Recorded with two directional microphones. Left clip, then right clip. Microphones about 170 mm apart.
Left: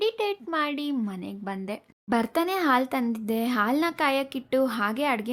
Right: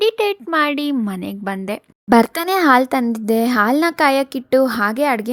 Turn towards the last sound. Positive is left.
turn(degrees=-30)  # may be behind; listen again after turning